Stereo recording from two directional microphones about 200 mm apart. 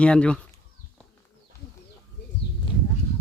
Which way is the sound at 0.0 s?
5° left (ahead or behind).